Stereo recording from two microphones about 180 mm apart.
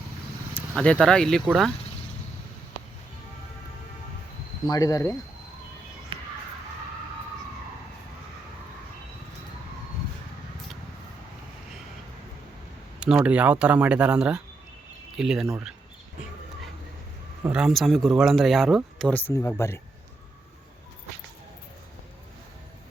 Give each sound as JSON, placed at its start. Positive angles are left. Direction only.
{"t": 0.8, "sound": "speech", "side_deg": 5}
{"t": 4.7, "sound": "speech", "side_deg": 20}
{"t": 6.1, "sound": "a sound", "side_deg": -30}
{"t": 13.0, "sound": "speech", "side_deg": -5}
{"t": 15.4, "sound": "speech", "side_deg": -15}
{"t": 17.4, "sound": "speech", "side_deg": -5}